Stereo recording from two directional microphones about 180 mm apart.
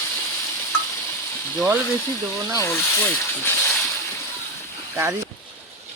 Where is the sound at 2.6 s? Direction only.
15° left (ahead or behind).